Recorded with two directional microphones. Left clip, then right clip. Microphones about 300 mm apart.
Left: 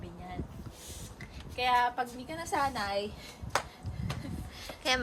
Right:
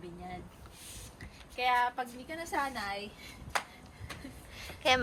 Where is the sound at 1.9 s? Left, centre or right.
Left.